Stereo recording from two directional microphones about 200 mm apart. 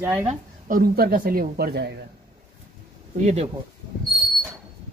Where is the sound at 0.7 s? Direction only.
50° right (ahead or behind).